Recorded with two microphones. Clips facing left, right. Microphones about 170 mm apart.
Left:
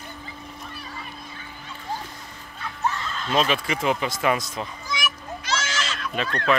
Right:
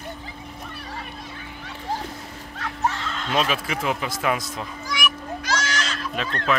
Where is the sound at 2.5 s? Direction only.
80° right.